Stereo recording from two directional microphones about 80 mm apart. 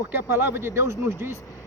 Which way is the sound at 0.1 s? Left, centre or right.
Right.